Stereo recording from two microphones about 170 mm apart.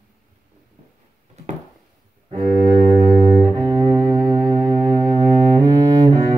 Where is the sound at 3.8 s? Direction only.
15° right (ahead or behind).